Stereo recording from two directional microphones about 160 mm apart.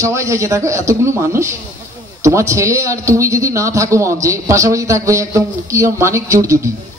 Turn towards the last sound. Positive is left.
turn(degrees=-20)  # may be behind; listen again after turning